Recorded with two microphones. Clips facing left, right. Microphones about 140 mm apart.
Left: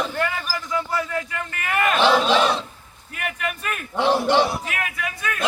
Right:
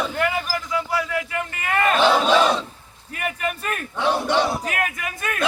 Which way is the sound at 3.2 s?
40° right (ahead or behind).